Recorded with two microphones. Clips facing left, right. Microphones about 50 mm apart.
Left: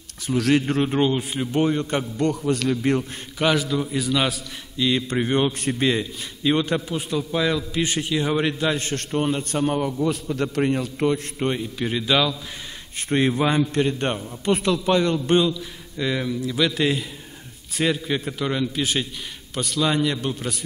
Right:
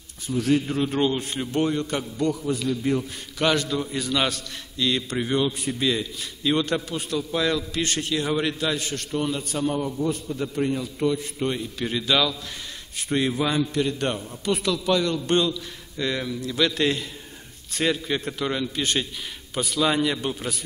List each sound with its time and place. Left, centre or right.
0.3 s a man's voice: left
0.8 s a man's voice: centre
2.1 s a man's voice: left
3.3 s a man's voice: centre
8.7 s a man's voice: left
9.1 s a man's voice: left
9.6 s a man's voice: left
10.3 s a man's voice: left
10.6 s a man's voice: left
11.3 s a man's voice: left
11.8 s a man's voice: centre; by 15.1 s left
15.1 s a man's voice: centre